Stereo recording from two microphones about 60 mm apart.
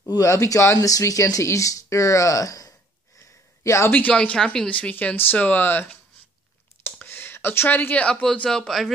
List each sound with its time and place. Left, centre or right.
0.1 s speech: left
0.7 s speech: left
3.6 s speech: left
4.1 s a man's voice: centre; by 5.9 s left
6.8 s a sound: left
8.1 s a man's voice: centre